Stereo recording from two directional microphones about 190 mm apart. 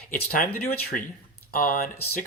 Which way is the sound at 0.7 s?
55° left (ahead or behind).